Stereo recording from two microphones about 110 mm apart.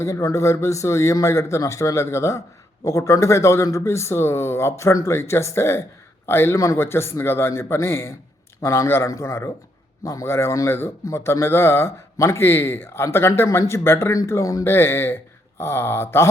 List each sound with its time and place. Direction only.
0.0 s a man's voice: 25° left (ahead or behind)